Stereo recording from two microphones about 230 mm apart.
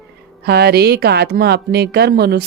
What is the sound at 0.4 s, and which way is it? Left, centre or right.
Speech, right.